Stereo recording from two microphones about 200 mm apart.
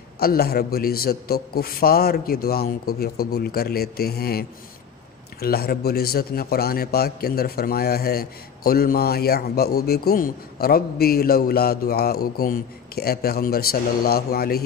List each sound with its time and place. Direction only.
0.2 s a man's voice: 50° left (ahead or behind)